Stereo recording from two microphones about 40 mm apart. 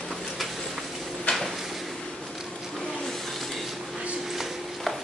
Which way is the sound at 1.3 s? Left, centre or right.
Left.